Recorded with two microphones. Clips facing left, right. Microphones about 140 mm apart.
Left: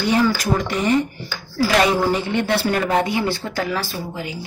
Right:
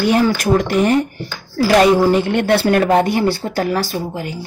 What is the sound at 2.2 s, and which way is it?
Speech, 60° right (ahead or behind).